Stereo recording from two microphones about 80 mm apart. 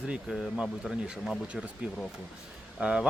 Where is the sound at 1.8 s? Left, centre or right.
Centre.